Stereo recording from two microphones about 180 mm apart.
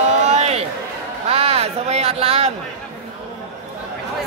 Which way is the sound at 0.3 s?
35° right (ahead or behind).